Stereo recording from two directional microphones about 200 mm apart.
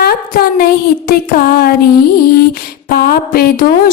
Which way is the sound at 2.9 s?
50° left (ahead or behind).